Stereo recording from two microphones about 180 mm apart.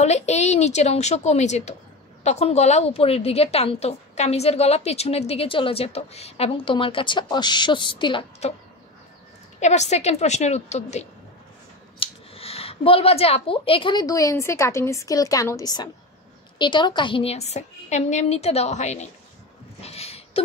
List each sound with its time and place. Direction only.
0.0 s a woman's voice: 40° left (ahead or behind)
9.6 s a woman's voice: 40° left (ahead or behind)
19.8 s a sound: 35° left (ahead or behind)